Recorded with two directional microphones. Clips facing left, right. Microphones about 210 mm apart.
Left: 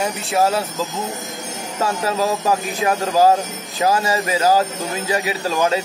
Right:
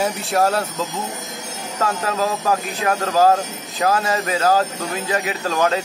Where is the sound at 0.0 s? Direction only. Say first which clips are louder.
Even; centre (ahead or behind).